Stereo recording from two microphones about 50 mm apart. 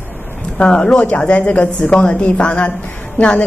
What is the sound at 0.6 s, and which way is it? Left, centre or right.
A woman's voice, centre.